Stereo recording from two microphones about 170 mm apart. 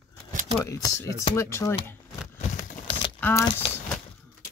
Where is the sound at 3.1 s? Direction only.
10° left (ahead or behind).